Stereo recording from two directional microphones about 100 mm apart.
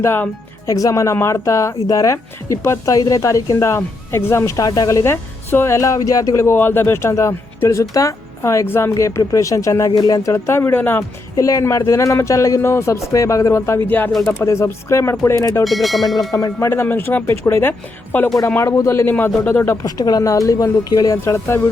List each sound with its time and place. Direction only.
0.0 s speech: 20° left (ahead or behind)
0.7 s speech: 35° left (ahead or behind)
5.0 s speech: 20° left (ahead or behind); by 10.3 s 40° left (ahead or behind)
10.3 s speech: 25° left (ahead or behind)
11.3 s speech: 35° left (ahead or behind); by 14.1 s 20° left (ahead or behind)
14.1 s speech: centre (ahead or behind)
14.4 s speech: 30° left (ahead or behind)
15.6 s speech: centre (ahead or behind)
16.3 s speech: 35° left (ahead or behind)
16.6 s speech: 20° left (ahead or behind)
19.8 s speech: 35° left (ahead or behind)